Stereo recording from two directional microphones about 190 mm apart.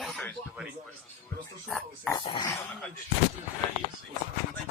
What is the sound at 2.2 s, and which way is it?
Speech, 25° left (ahead or behind).